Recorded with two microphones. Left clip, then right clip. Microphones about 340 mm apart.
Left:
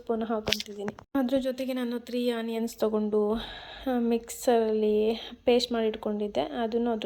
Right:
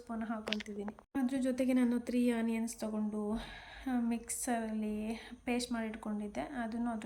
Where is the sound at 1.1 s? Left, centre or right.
Centre.